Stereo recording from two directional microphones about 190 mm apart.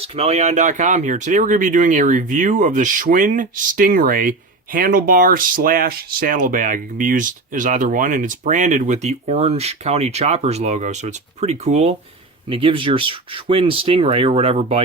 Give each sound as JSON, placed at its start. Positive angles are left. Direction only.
{"t": 0.0, "sound": "speech", "side_deg": -30}